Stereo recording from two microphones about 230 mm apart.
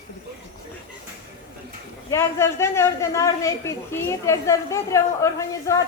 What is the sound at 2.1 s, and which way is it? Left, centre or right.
A man's voice, centre.